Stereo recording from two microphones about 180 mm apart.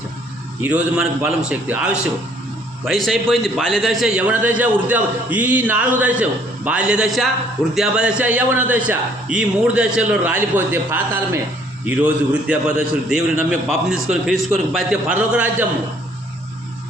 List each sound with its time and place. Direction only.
0.6 s a man's voice: 10° right (ahead or behind)